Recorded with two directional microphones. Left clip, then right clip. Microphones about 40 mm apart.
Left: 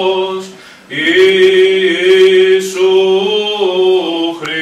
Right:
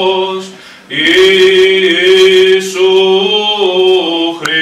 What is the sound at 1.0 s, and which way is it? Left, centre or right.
Sheep, left.